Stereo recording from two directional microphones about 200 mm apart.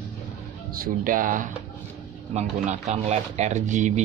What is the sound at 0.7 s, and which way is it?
Speech, 45° right (ahead or behind).